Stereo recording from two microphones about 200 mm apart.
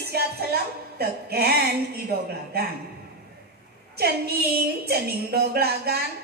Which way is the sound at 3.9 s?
50° right (ahead or behind).